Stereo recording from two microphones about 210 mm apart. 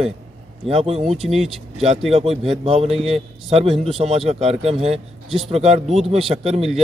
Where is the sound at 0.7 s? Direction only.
30° right (ahead or behind).